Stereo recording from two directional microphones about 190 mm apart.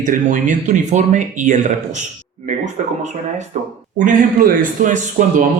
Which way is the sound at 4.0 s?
45° right (ahead or behind).